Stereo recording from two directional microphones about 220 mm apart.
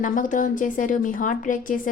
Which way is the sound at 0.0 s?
35° left (ahead or behind).